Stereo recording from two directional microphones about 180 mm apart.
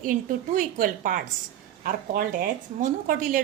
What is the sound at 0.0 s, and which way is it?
A woman's voice, 50° right (ahead or behind).